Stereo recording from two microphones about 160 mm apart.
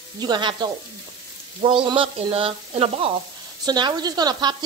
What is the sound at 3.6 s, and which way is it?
Speech, 25° right (ahead or behind).